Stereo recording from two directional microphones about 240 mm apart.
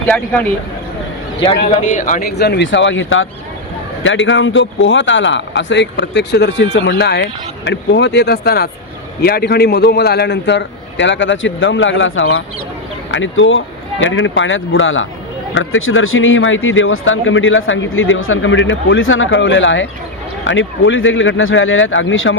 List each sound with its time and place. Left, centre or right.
1.7 s a man's voice: left